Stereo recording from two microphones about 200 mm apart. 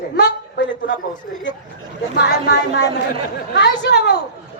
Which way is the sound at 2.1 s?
55° left (ahead or behind).